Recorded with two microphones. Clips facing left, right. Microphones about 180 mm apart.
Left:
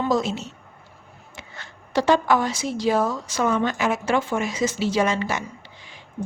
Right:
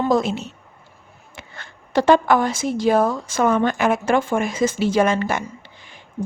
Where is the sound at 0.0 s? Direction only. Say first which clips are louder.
Right 3 dB; 55° right (ahead or behind).